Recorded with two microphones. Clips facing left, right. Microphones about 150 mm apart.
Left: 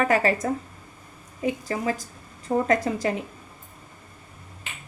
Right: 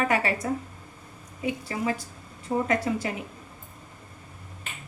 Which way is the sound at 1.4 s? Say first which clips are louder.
Left 3 dB; 40° left (ahead or behind).